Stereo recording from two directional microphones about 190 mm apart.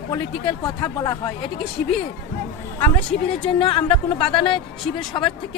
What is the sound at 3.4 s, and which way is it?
Speech, 30° left (ahead or behind).